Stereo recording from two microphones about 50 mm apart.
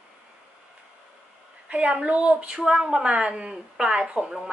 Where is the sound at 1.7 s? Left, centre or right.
Right; by 4.5 s centre.